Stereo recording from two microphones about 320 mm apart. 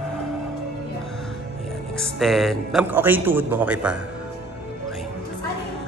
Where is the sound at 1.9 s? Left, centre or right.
Centre.